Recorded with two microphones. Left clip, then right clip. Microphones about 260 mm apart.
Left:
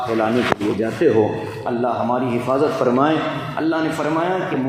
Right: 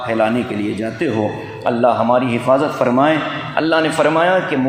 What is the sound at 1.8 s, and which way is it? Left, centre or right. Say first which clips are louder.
A man's voice: right 7 dB; right.